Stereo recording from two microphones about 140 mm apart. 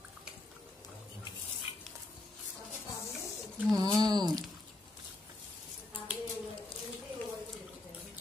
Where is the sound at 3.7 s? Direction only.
25° right (ahead or behind).